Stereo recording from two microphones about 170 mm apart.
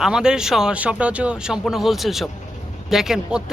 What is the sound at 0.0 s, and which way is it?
Speech, 5° right (ahead or behind).